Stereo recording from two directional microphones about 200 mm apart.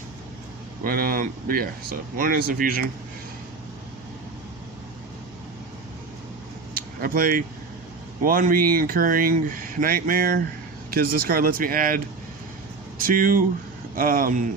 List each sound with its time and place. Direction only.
0.9 s speech: 45° right (ahead or behind)
7.0 s speech: 45° right (ahead or behind)
13.0 s speech: 45° right (ahead or behind)